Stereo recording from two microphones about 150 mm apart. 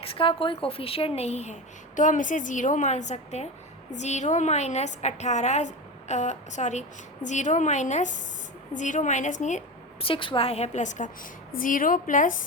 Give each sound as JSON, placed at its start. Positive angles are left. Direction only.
{"t": 0.0, "sound": "a woman's voice", "side_deg": 35}
{"t": 2.0, "sound": "a woman's voice", "side_deg": 60}
{"t": 10.0, "sound": "a woman's voice", "side_deg": 35}
{"t": 11.5, "sound": "a woman's voice", "side_deg": 65}